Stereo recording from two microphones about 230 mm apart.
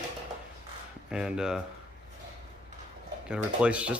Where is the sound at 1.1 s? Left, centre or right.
Centre.